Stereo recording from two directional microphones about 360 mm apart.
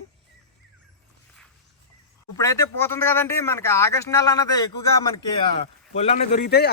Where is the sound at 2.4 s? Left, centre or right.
Centre.